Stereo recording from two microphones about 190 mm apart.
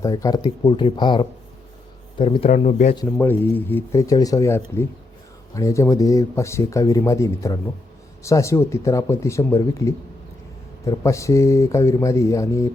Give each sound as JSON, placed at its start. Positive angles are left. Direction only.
{"t": 0.0, "sound": "speech", "side_deg": 20}
{"t": 2.5, "sound": "speech", "side_deg": 40}
{"t": 2.9, "sound": "speech", "side_deg": 15}